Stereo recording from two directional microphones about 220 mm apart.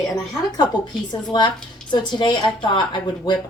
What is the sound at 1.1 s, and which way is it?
A woman's voice, 20° left (ahead or behind).